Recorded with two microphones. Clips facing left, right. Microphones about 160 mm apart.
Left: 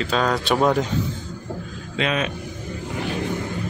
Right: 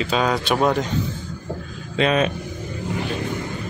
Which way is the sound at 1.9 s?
35° right (ahead or behind).